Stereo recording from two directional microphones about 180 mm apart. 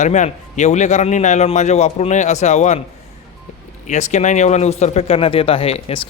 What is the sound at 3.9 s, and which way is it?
A man's voice, 40° left (ahead or behind).